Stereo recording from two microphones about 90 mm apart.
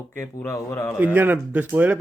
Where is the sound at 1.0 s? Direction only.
20° right (ahead or behind).